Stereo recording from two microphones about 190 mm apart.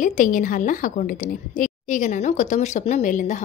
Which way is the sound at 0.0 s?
45° left (ahead or behind).